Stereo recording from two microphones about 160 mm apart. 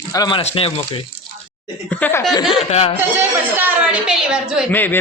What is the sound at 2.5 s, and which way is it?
Speech, 35° left (ahead or behind).